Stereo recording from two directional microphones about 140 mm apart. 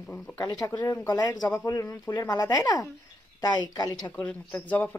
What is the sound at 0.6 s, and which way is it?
Speech, 20° left (ahead or behind).